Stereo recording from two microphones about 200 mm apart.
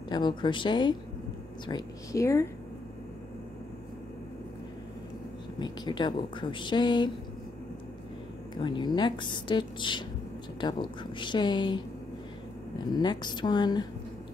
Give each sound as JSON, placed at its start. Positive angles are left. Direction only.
{"t": 0.1, "sound": "speech", "side_deg": 20}
{"t": 5.6, "sound": "speech", "side_deg": 20}
{"t": 8.5, "sound": "speech", "side_deg": 25}
{"t": 12.9, "sound": "speech", "side_deg": 20}